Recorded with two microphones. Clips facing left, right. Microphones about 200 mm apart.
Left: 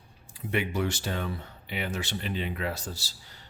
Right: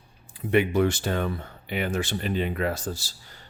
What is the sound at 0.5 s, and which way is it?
Speech, 55° right (ahead or behind).